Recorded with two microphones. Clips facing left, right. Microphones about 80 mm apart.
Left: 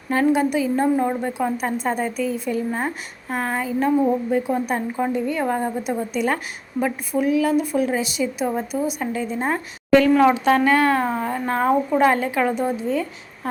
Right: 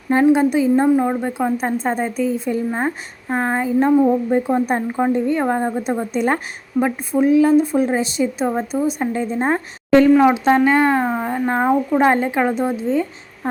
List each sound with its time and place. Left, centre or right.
0.1 s a woman's voice: right
0.9 s speech: centre
1.5 s a woman's voice: right
10.0 s a woman's voice: centre